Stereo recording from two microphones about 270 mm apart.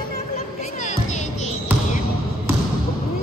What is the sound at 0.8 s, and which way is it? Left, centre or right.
Music, left.